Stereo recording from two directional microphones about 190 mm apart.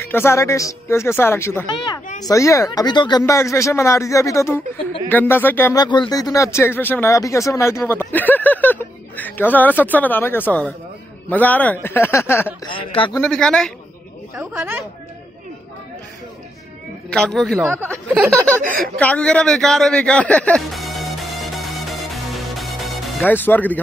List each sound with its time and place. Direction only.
0.1 s speech: 15° left (ahead or behind)
12.6 s speech: 25° left (ahead or behind)
13.1 s speech: 5° left (ahead or behind)
14.3 s speech: 10° right (ahead or behind)
17.1 s speech: centre (ahead or behind)
18.6 s speech: 45° right (ahead or behind)
18.9 s music: 5° left (ahead or behind)